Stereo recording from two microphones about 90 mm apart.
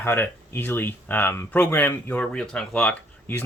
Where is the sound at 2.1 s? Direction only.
5° left (ahead or behind).